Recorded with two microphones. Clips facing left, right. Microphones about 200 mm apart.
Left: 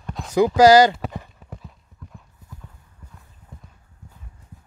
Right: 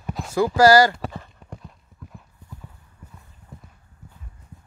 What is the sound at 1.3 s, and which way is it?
Clip-clop, centre (ahead or behind).